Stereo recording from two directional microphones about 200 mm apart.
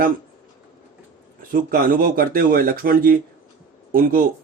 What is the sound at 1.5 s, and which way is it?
A man's voice, 45° right (ahead or behind).